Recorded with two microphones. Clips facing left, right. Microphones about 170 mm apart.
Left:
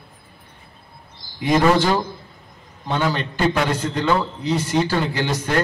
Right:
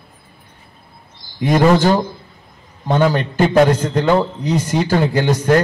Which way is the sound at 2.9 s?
45° right (ahead or behind).